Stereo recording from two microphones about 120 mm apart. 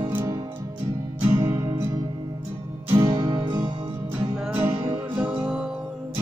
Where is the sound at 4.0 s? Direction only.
20° right (ahead or behind).